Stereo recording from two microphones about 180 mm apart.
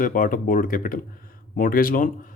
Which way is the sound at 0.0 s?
50° left (ahead or behind).